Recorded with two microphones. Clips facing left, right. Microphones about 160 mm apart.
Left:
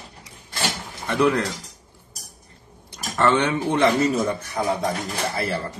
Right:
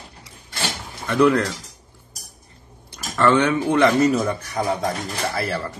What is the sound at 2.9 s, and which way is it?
Speech, 25° left (ahead or behind).